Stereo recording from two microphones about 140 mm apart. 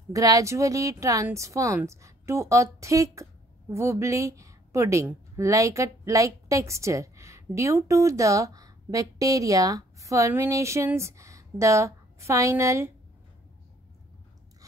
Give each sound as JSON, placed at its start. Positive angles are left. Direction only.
{"t": 0.1, "sound": "speech", "side_deg": -25}